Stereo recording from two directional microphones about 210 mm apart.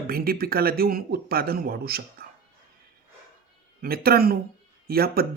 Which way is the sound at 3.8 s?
45° right (ahead or behind).